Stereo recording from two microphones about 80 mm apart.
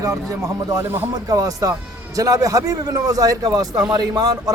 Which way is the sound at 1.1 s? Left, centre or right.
Right.